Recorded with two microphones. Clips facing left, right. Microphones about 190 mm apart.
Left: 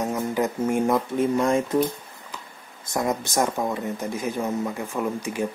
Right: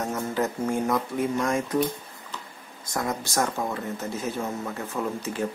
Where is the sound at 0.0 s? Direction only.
15° left (ahead or behind).